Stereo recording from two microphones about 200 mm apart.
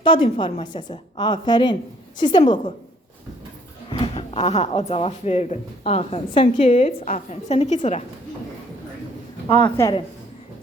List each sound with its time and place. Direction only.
0.0 s a woman's voice: 25° left (ahead or behind)
3.8 s speech: 30° left (ahead or behind)
9.6 s a woman's voice: 15° left (ahead or behind)